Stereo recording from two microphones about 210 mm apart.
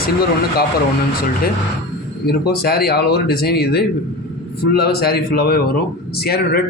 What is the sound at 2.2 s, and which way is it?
A man's voice, 50° left (ahead or behind).